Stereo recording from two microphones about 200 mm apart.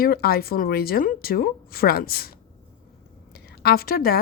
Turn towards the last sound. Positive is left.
turn(degrees=45)  # may be behind; listen again after turning